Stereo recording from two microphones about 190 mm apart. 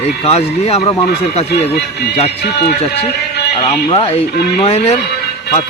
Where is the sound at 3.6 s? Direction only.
30° left (ahead or behind).